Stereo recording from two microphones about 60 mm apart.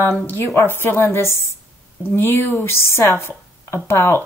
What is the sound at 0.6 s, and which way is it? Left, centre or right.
Speech, left.